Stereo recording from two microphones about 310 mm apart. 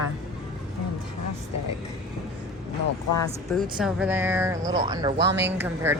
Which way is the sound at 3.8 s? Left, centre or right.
Centre.